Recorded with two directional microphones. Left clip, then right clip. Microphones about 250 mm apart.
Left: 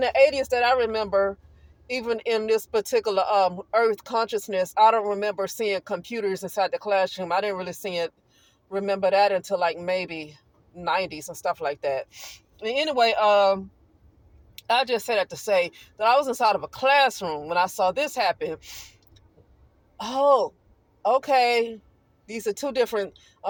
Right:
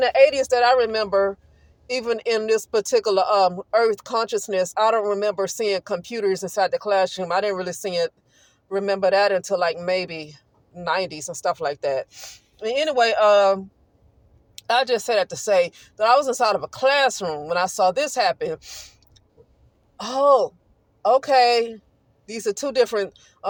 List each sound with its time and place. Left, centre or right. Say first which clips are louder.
0.0 s speech: right 3 dB; centre